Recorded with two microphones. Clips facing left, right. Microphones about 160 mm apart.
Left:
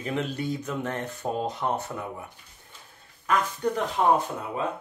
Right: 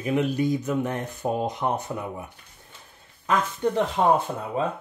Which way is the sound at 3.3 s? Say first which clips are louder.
Right 2 dB; 25° right (ahead or behind).